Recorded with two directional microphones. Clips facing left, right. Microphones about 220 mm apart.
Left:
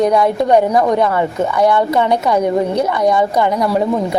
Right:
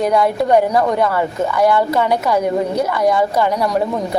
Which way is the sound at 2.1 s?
5° right (ahead or behind).